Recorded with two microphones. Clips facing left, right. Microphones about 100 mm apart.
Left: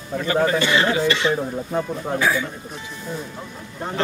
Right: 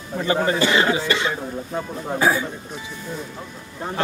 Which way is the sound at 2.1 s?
35° right (ahead or behind).